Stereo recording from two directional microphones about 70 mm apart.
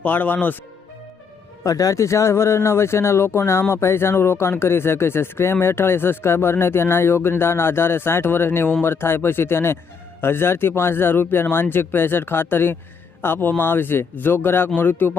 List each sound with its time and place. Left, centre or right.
0.0 s speech: left
1.6 s speech: left